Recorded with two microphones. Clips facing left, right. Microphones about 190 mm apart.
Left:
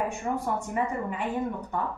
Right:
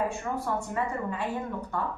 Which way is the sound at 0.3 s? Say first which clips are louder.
Left 2 dB; 25° left (ahead or behind).